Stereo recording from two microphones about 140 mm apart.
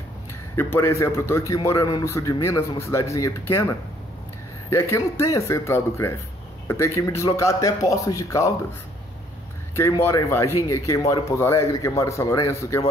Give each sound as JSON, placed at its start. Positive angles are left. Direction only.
{"t": 0.6, "sound": "speech", "side_deg": 20}
{"t": 4.7, "sound": "speech", "side_deg": 20}
{"t": 9.8, "sound": "speech", "side_deg": 20}